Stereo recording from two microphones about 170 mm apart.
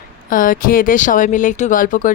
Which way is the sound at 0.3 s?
50° left (ahead or behind).